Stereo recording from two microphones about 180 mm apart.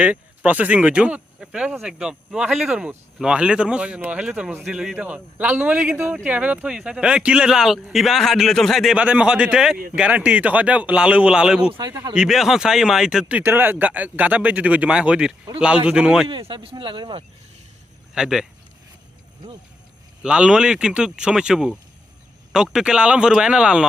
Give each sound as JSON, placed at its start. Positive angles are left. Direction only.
{"t": 0.0, "sound": "speech", "side_deg": -10}
{"t": 11.7, "sound": "speech", "side_deg": -25}
{"t": 12.1, "sound": "speech", "side_deg": -5}
{"t": 16.3, "sound": "speech", "side_deg": -25}
{"t": 18.1, "sound": "speech", "side_deg": -5}
{"t": 20.2, "sound": "speech", "side_deg": -5}